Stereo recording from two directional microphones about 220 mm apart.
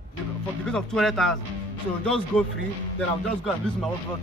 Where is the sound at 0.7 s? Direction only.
5° left (ahead or behind).